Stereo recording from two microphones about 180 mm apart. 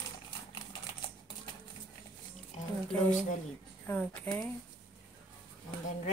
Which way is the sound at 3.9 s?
10° left (ahead or behind).